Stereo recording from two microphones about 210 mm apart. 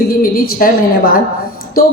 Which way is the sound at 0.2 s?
45° left (ahead or behind).